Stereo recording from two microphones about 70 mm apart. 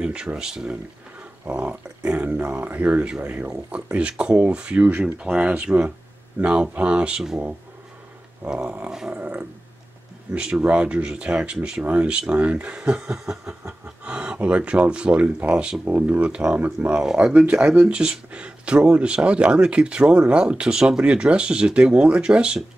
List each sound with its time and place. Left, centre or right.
0.0 s speech: centre
1.4 s speech: right
8.6 s speech: right
10.3 s speech: centre
17.0 s speech: centre